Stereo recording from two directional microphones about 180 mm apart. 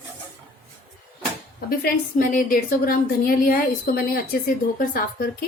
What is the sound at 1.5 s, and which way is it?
A woman's voice, 55° left (ahead or behind).